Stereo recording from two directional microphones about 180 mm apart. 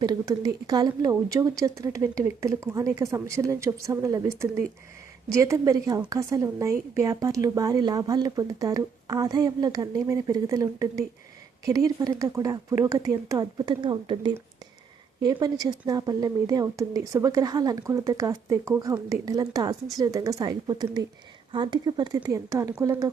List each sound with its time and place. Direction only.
0.0 s speech: 20° right (ahead or behind)